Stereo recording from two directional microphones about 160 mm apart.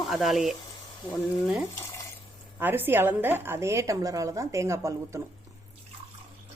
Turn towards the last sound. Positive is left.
turn(degrees=-20)  # may be behind; listen again after turning